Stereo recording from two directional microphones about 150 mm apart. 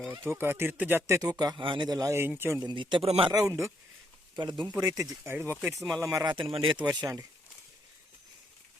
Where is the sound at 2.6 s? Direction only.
30° right (ahead or behind).